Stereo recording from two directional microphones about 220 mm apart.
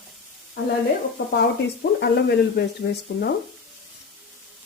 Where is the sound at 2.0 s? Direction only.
50° left (ahead or behind).